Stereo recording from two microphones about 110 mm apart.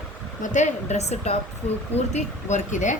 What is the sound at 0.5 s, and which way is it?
Speech, 90° left.